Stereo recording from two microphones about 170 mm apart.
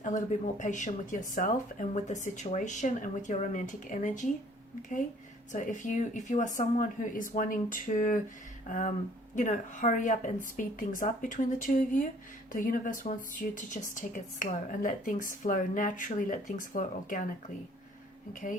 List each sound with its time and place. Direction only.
0.0 s speech: 45° left (ahead or behind)
5.5 s speech: 50° left (ahead or behind)
9.3 s speech: 50° left (ahead or behind)